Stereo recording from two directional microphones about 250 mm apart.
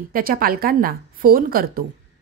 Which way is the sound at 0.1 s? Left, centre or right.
Right.